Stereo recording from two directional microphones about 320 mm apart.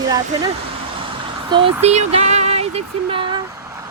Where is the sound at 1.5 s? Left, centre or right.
Centre.